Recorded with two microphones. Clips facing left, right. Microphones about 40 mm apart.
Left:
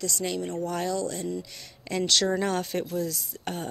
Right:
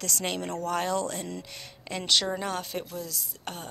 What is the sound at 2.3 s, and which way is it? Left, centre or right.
Speech, centre.